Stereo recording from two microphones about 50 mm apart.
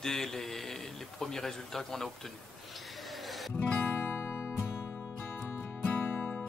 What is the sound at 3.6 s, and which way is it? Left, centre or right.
Music, left.